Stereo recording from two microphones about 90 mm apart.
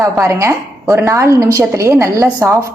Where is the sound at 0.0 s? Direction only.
30° right (ahead or behind).